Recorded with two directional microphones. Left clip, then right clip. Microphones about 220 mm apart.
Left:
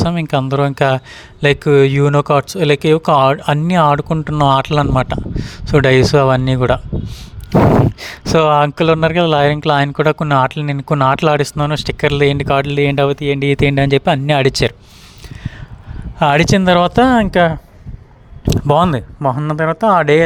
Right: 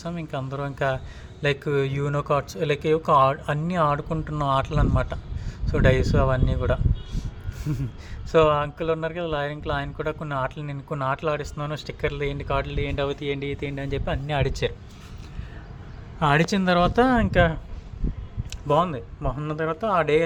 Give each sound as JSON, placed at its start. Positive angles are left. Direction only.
{"t": 0.0, "sound": "speech", "side_deg": 45}
{"t": 16.1, "sound": "speech", "side_deg": 45}
{"t": 18.4, "sound": "speech", "side_deg": 50}